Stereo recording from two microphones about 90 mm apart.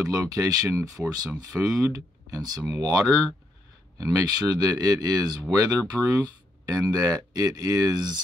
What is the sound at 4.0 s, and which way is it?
Speech, 45° right (ahead or behind).